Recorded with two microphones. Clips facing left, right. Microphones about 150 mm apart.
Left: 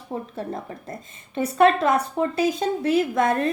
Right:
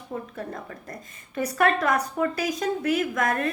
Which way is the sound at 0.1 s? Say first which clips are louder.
Left 4 dB; 25° left (ahead or behind).